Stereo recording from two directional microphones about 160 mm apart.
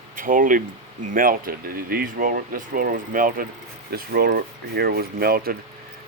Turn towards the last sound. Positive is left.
turn(degrees=-70)  # may be behind; listen again after turning